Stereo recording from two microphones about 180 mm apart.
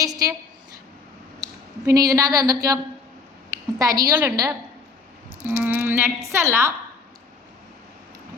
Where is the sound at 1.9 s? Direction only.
20° right (ahead or behind).